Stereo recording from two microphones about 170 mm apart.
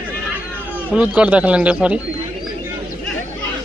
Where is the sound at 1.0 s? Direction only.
10° right (ahead or behind).